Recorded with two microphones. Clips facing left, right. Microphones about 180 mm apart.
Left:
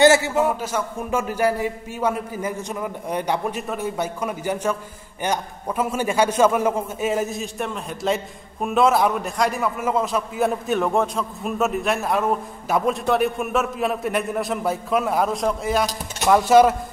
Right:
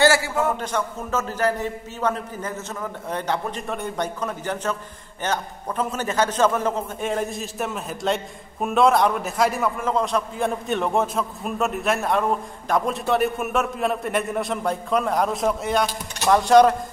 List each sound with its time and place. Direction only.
0.0 s a man's voice: 20° left (ahead or behind)
0.5 s a man's voice: 5° left (ahead or behind)